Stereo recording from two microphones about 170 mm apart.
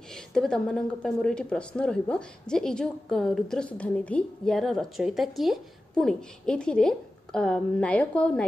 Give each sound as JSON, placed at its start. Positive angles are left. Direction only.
{"t": 0.1, "sound": "a woman's voice", "side_deg": 5}